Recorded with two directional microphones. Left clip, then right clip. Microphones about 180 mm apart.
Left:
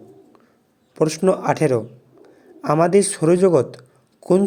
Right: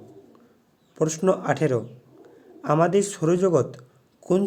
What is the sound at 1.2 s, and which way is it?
Speech, 20° left (ahead or behind).